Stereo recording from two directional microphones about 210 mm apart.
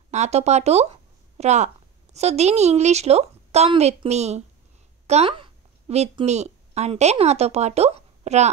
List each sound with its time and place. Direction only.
0.1 s a woman's voice: 30° right (ahead or behind)